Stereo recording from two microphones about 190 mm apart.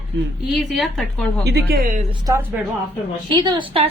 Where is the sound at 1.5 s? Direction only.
55° right (ahead or behind).